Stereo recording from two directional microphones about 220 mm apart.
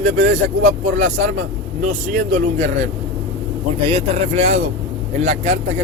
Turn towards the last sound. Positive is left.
turn(degrees=-30)  # may be behind; listen again after turning